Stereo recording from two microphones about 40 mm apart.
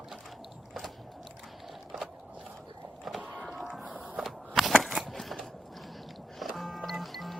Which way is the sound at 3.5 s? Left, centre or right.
Centre.